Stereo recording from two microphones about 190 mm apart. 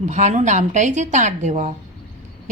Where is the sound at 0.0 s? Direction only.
40° right (ahead or behind).